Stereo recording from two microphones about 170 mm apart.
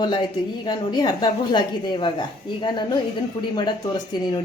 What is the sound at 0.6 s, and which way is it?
A woman's voice, 25° left (ahead or behind).